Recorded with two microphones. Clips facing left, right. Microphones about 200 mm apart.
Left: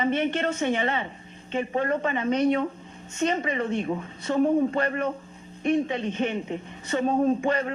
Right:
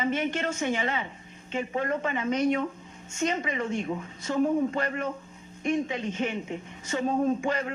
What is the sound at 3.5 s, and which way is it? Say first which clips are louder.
Speech: left 3 dB; 60° left (ahead or behind).